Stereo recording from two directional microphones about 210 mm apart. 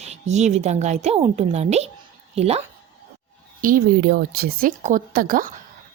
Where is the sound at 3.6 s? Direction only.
45° right (ahead or behind).